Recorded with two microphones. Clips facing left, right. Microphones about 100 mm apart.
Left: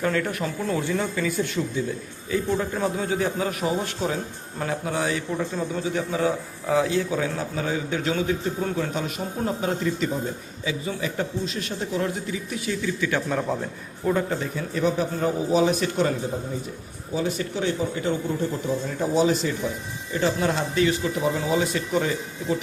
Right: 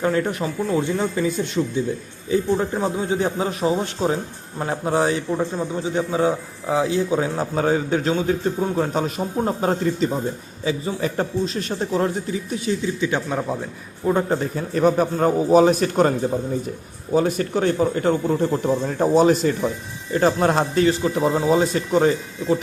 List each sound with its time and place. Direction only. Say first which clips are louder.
0.0 s a man's voice: right 4 dB; 25° right (ahead or behind)
5.3 s a man's voice: right 4 dB; 20° right (ahead or behind)
7.2 s a man's voice: right 5 dB; 40° right (ahead or behind); by 13.2 s 20° right (ahead or behind)
13.2 s a man's voice: right 1 dB; 10° right (ahead or behind)
14.1 s a man's voice: right 4 dB; 35° right (ahead or behind)
17.2 s a man's voice: right 6 dB; 50° right (ahead or behind)
20.8 s a man's voice: right 4 dB; 35° right (ahead or behind)